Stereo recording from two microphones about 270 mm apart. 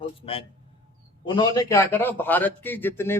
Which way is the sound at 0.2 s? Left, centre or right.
Left.